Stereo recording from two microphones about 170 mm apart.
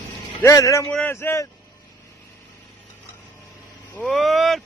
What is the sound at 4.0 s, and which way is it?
Speech, centre (ahead or behind).